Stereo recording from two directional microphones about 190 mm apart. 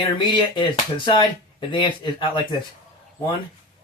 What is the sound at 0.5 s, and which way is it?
Speech, 25° left (ahead or behind).